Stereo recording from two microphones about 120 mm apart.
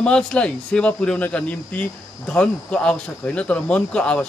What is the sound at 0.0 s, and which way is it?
Speech, 10° left (ahead or behind).